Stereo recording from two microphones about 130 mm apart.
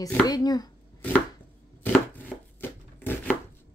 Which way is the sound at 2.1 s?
15° left (ahead or behind).